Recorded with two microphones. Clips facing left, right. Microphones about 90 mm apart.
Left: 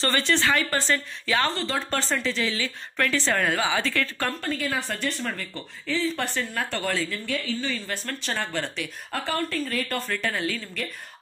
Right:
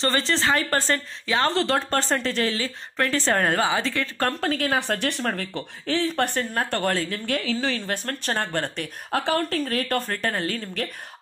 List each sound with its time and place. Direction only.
0.0 s speech: 30° right (ahead or behind)
0.7 s a woman's voice: 45° right (ahead or behind)
1.2 s speech: 25° right (ahead or behind)
1.5 s speech: 90° right
1.9 s speech: 45° right (ahead or behind)
3.7 s speech: 25° right (ahead or behind)
4.4 s speech: 65° right (ahead or behind); by 7.2 s 50° right (ahead or behind)
7.2 s a woman's voice: 85° right
7.8 s a woman's voice: 55° right (ahead or behind)
9.2 s a woman's voice: 65° right (ahead or behind); by 10.9 s 45° right (ahead or behind)